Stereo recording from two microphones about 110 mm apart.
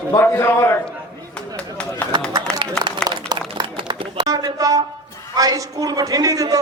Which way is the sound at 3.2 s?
45° right (ahead or behind).